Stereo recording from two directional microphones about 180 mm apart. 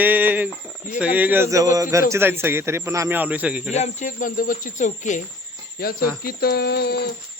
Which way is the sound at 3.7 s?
40° left (ahead or behind).